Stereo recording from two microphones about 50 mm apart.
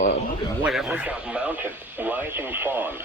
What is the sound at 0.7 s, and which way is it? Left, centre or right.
Speech, centre.